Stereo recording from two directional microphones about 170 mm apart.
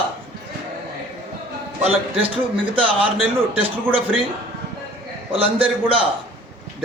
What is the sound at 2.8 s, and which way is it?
A man's voice, 30° right (ahead or behind).